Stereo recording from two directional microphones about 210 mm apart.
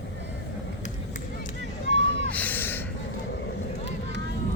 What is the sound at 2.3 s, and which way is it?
Gasp, 10° left (ahead or behind).